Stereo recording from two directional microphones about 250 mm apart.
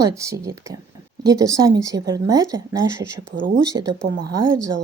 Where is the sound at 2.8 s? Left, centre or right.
Right.